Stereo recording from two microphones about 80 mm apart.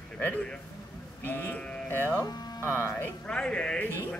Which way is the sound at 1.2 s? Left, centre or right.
Left.